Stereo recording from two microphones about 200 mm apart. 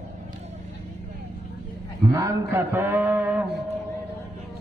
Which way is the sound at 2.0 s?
15° right (ahead or behind).